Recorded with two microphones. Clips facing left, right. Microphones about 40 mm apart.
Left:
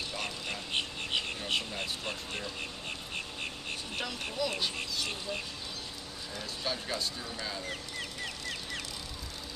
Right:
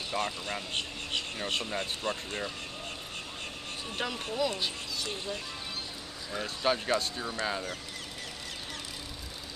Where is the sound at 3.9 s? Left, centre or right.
Right.